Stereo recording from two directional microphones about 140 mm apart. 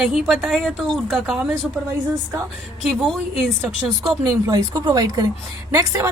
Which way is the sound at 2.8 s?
Centre (ahead or behind).